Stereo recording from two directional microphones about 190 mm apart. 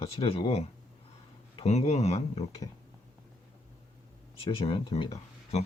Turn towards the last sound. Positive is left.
turn(degrees=30)  # may be behind; listen again after turning